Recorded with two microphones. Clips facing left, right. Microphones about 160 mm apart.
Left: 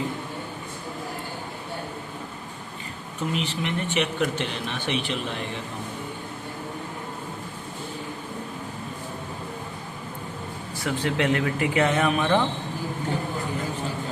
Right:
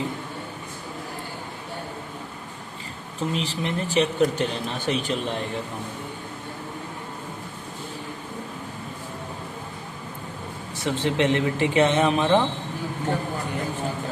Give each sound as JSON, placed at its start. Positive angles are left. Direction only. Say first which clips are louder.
{"t": 3.2, "sound": "speech", "louder": "right 1 dB", "side_deg": -35}
{"t": 10.8, "sound": "speech", "louder": "right 2 dB", "side_deg": -25}